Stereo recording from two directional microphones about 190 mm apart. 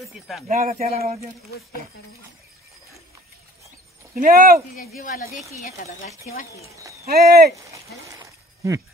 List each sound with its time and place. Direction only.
0.5 s speech: 45° right (ahead or behind)
0.8 s speech: 35° right (ahead or behind)
4.1 s speech: 45° right (ahead or behind)
4.7 s speech: 50° left (ahead or behind)
5.6 s speech: 35° left (ahead or behind)
6.7 s speech: 15° right (ahead or behind)
7.1 s speech: 55° right (ahead or behind)
7.7 s a sound: 15° right (ahead or behind)